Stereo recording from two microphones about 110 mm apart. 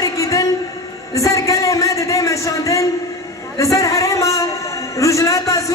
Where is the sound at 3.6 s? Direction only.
30° left (ahead or behind).